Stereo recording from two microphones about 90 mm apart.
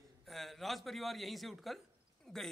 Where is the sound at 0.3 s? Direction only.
Centre (ahead or behind).